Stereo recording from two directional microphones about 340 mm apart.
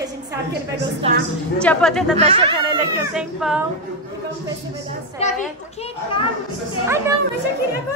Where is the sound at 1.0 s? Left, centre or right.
Centre.